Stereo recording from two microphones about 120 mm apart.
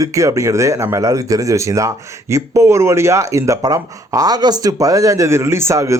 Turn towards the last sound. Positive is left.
turn(degrees=-25)  # may be behind; listen again after turning